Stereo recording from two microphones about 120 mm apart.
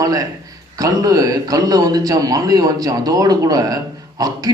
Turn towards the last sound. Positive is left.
turn(degrees=-30)  # may be behind; listen again after turning